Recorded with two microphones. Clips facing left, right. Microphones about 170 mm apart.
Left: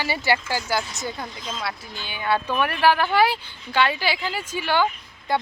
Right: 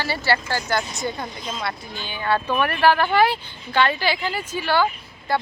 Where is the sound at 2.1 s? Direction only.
15° left (ahead or behind).